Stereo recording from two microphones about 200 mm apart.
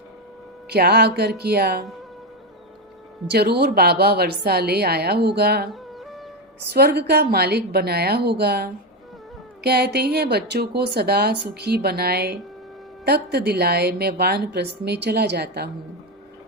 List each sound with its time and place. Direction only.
0.7 s speech: 55° right (ahead or behind)
3.2 s speech: 55° right (ahead or behind)
5.7 s music: centre (ahead or behind)
6.7 s speech: 55° right (ahead or behind)